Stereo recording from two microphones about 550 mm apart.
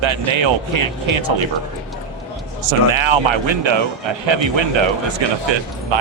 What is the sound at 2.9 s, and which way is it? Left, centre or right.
Speech, right.